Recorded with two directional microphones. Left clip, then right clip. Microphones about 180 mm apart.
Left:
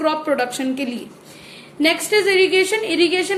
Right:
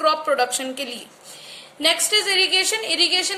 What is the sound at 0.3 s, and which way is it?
Speech, 70° right (ahead or behind).